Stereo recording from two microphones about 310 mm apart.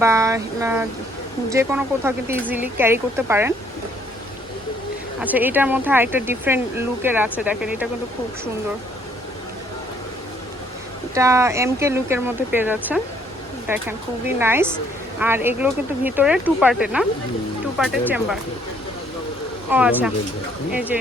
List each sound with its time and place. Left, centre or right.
0.0 s speech: centre
5.2 s speech: centre
11.1 s speech: centre
19.7 s speech: centre